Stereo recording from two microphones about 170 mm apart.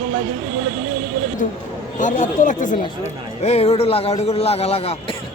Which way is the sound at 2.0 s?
50° left (ahead or behind).